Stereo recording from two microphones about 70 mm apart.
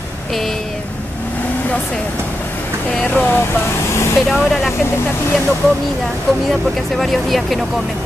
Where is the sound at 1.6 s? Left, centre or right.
Centre.